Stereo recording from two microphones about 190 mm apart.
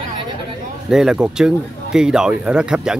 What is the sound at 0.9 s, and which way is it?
A man's voice, centre (ahead or behind).